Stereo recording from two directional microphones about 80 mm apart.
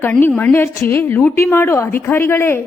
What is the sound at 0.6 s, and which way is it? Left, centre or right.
A woman's voice, left.